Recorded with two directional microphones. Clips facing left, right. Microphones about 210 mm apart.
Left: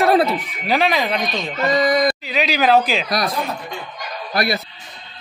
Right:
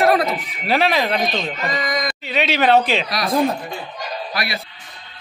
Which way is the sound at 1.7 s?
35° left (ahead or behind).